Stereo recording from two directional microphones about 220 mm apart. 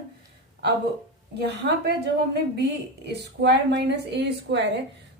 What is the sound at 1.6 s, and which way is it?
Speech, 45° right (ahead or behind).